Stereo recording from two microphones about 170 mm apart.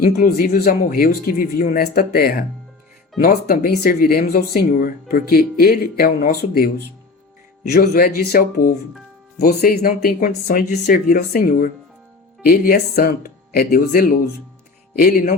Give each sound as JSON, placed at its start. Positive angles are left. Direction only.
{"t": 0.0, "sound": "speech", "side_deg": 60}
{"t": 9.4, "sound": "speech", "side_deg": 65}